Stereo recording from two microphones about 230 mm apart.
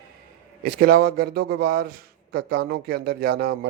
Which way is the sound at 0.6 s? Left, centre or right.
Right.